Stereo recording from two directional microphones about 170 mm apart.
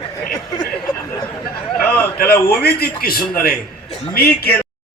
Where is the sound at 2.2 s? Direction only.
65° left (ahead or behind).